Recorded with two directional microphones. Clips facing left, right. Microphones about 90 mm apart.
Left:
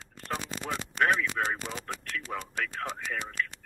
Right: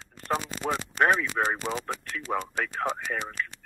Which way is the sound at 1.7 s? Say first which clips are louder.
Right 8 dB; 55° right (ahead or behind).